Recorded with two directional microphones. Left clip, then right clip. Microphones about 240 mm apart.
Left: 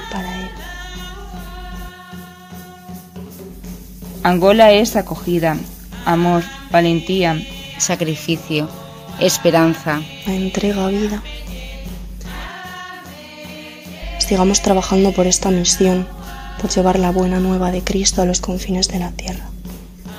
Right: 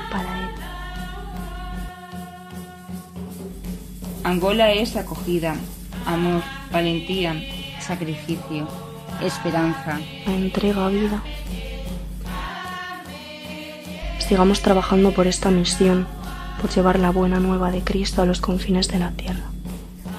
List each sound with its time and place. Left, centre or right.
4.2 s a woman's voice: left
10.2 s speech: centre
14.1 s speech: centre